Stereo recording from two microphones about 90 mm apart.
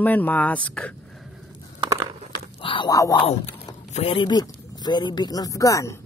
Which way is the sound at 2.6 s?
70° left (ahead or behind).